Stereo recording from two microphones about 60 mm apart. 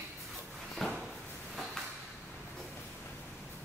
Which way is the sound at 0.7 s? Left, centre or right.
Centre.